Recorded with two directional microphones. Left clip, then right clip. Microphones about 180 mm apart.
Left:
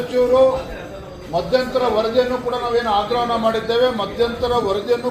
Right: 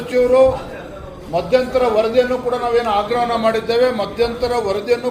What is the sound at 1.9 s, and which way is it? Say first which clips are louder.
Speech: right 3 dB; 35° right (ahead or behind).